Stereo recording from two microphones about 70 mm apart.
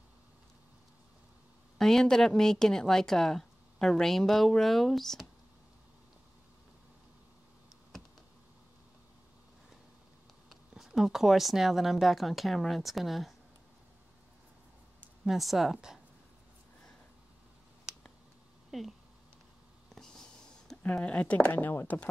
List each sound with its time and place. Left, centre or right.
1.8 s speech: centre
10.7 s speech: centre
15.2 s speech: centre
17.9 s a sound: centre
20.9 s speech: centre